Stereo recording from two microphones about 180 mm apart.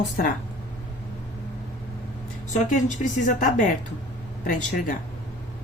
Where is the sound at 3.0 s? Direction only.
50° left (ahead or behind).